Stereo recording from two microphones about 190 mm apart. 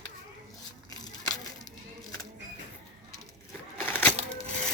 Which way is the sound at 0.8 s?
20° left (ahead or behind).